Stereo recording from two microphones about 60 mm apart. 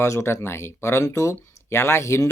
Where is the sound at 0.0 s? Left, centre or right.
Left.